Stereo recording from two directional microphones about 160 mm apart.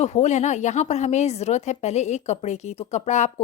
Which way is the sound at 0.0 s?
45° left (ahead or behind).